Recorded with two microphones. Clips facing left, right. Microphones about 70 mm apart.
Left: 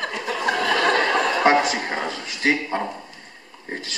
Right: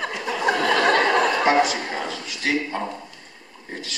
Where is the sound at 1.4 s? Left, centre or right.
Left.